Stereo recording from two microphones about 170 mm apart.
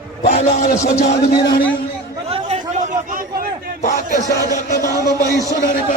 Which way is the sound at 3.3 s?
60° right (ahead or behind).